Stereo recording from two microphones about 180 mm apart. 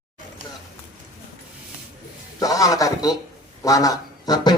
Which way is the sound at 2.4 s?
20° left (ahead or behind).